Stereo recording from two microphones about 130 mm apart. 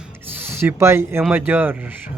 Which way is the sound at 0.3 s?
15° right (ahead or behind).